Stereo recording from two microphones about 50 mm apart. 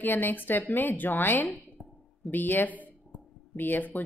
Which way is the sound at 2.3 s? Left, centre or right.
Left.